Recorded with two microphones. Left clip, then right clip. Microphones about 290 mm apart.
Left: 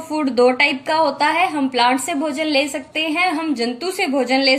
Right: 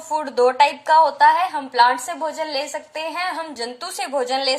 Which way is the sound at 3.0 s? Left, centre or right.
Right.